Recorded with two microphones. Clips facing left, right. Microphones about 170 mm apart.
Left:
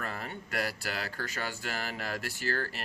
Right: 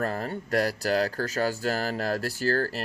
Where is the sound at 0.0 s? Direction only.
40° right (ahead or behind).